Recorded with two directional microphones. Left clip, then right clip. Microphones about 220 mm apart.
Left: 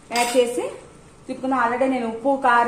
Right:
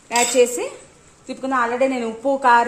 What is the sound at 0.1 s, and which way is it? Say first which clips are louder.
Tambourine: right 3 dB; 50° right (ahead or behind).